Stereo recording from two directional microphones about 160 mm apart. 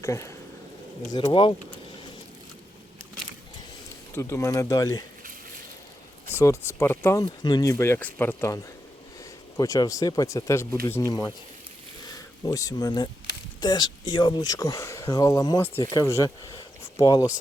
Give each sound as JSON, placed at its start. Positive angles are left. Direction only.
{"t": 0.0, "sound": "speech", "side_deg": 20}
{"t": 1.1, "sound": "speech", "side_deg": 30}
{"t": 4.1, "sound": "speech", "side_deg": 15}
{"t": 6.3, "sound": "speech", "side_deg": 20}
{"t": 12.5, "sound": "speech", "side_deg": 20}